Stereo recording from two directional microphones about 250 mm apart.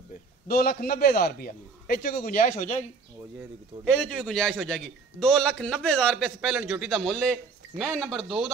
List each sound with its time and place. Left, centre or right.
0.1 s a man's voice: left
3.3 s a man's voice: centre